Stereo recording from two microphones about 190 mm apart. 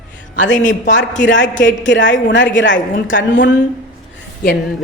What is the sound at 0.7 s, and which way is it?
Speech, 75° left (ahead or behind).